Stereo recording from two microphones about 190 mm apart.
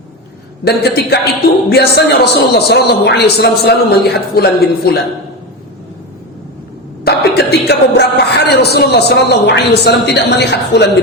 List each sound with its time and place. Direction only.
0.6 s a man's voice: 55° left (ahead or behind)
7.0 s speech: 60° left (ahead or behind)